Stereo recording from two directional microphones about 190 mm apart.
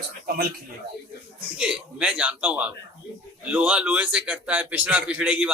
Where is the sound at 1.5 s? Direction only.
5° right (ahead or behind).